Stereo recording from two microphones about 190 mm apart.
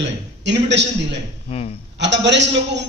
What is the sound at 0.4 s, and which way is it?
Speech, 65° right (ahead or behind).